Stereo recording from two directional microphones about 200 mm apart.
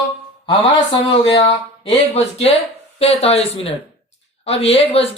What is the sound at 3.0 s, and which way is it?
Speech, 30° left (ahead or behind).